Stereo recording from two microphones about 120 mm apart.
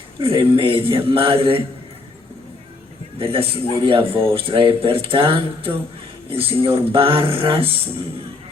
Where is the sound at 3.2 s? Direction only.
50° right (ahead or behind).